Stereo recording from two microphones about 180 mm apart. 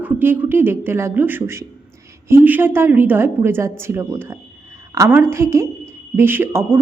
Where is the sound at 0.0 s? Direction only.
10° right (ahead or behind).